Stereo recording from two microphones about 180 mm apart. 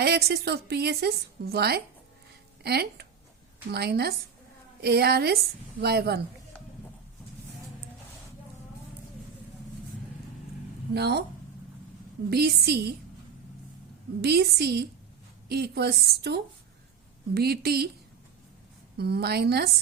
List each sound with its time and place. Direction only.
0.0 s a woman's voice: 60° right (ahead or behind)
10.9 s a woman's voice: 65° right (ahead or behind)
12.3 s a woman's voice: 60° right (ahead or behind)
14.2 s a woman's voice: 65° right (ahead or behind)
18.9 s a woman's voice: 65° right (ahead or behind)